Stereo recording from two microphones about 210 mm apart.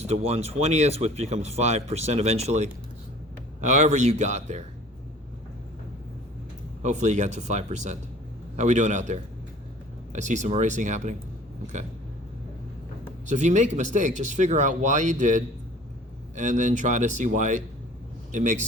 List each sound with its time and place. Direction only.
0.0 s speech: 30° right (ahead or behind)
3.8 s speech: 35° right (ahead or behind)
6.8 s speech: 35° right (ahead or behind)
11.6 s a sound: 35° right (ahead or behind)
13.2 s a man's voice: 35° right (ahead or behind)